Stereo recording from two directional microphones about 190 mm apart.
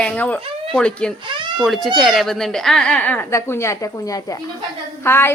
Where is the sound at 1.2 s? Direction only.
25° right (ahead or behind).